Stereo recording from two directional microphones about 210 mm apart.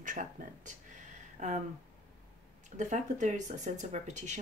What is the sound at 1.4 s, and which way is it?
Speech, 35° right (ahead or behind).